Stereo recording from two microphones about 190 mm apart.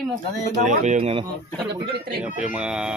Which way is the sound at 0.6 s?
40° right (ahead or behind).